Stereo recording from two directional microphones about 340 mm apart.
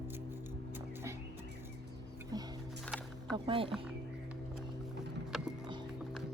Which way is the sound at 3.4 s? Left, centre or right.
Centre.